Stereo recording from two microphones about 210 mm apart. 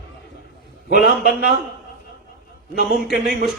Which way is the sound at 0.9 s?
50° left (ahead or behind).